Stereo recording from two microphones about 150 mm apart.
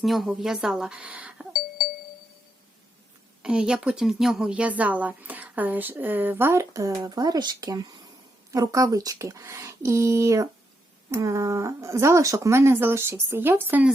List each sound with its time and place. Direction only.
0.0 s speech: centre (ahead or behind)
3.4 s speech: 5° right (ahead or behind)